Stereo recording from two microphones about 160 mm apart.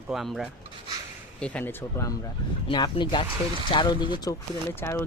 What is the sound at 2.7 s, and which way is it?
Speech, 30° left (ahead or behind).